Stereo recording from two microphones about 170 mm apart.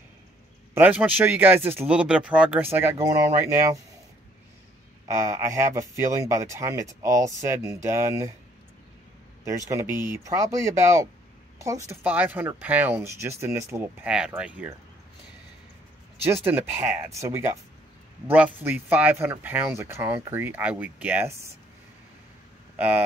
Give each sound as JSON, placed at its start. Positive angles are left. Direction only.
{"t": 0.7, "sound": "speech", "side_deg": -10}
{"t": 5.0, "sound": "speech", "side_deg": -15}
{"t": 9.7, "sound": "speech", "side_deg": -15}
{"t": 16.3, "sound": "speech", "side_deg": -10}
{"t": 22.8, "sound": "speech", "side_deg": -10}